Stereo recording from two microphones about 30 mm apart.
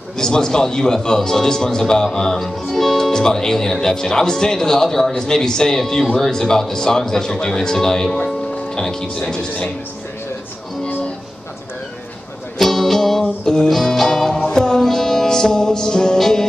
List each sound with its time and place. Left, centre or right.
0.2 s speech: left
2.3 s speech: centre
3.0 s speech: left
8.3 s music: centre
9.3 s speech: left
12.5 s music: centre
13.2 s music: left
13.7 s music: centre
16.2 s speech: centre